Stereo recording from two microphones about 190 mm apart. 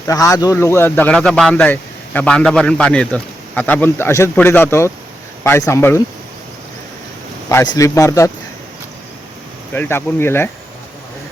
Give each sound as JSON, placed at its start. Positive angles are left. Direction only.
{"t": 0.1, "sound": "speech", "side_deg": 20}
{"t": 7.7, "sound": "speech", "side_deg": 15}
{"t": 9.7, "sound": "speech", "side_deg": 10}